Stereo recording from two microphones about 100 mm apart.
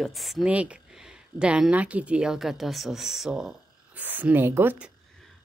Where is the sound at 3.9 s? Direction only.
15° right (ahead or behind).